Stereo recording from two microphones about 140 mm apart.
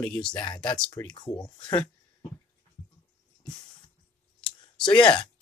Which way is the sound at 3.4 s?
5° left (ahead or behind).